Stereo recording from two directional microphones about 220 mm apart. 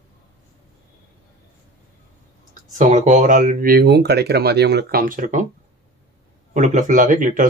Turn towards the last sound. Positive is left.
turn(degrees=-35)  # may be behind; listen again after turning